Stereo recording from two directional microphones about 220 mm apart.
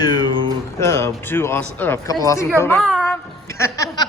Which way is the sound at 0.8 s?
10° left (ahead or behind).